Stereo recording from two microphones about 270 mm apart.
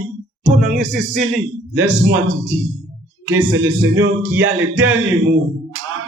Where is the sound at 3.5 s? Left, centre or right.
Right.